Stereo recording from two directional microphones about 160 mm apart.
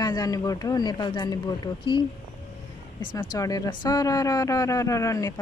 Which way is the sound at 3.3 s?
20° left (ahead or behind).